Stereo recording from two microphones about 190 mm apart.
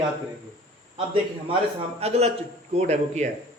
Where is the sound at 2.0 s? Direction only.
35° right (ahead or behind).